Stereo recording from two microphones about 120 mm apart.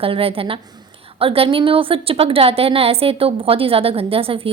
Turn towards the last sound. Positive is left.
turn(degrees=-50)  # may be behind; listen again after turning